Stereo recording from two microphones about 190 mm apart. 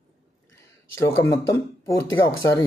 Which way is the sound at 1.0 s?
15° left (ahead or behind).